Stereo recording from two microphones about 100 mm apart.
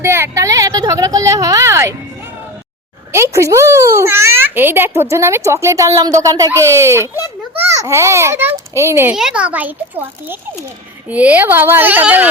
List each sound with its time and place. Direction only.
0.0 s a sound: 25° right (ahead or behind)
3.1 s a child's voice: 30° right (ahead or behind)
9.1 s a child's voice: 10° right (ahead or behind)